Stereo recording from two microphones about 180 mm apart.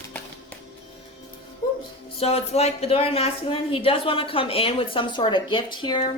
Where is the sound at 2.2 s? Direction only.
35° left (ahead or behind).